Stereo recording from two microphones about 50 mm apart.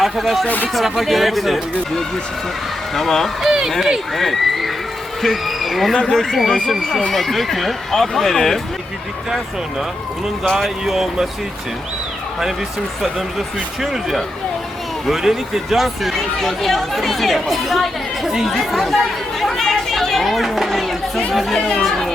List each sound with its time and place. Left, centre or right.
0.0 s speech: centre
0.4 s speech: left
0.7 s speech: centre
3.4 s speech: centre
10.6 s speech: centre
13.8 s speech: centre